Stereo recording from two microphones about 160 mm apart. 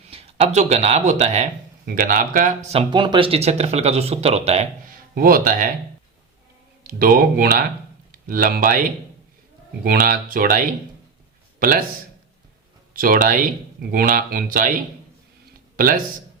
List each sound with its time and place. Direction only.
0.1 s speech: 40° right (ahead or behind)
1.8 s speech: 65° right (ahead or behind); by 2.8 s 45° right (ahead or behind)
2.9 s speech: 30° right (ahead or behind)
4.9 s speech: 65° right (ahead or behind)
6.8 s speech: 65° right (ahead or behind)
9.8 s speech: 65° right (ahead or behind)
12.9 s speech: 60° right (ahead or behind)
15.7 s a sound: 60° right (ahead or behind)